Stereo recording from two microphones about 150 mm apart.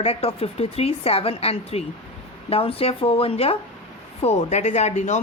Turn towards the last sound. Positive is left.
turn(degrees=50)  # may be behind; listen again after turning